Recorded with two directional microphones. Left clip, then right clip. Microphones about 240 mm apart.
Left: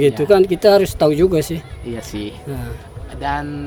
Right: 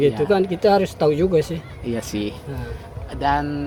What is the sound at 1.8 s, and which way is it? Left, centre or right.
Speech, right.